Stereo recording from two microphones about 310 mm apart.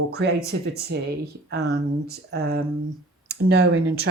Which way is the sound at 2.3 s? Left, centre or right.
Right.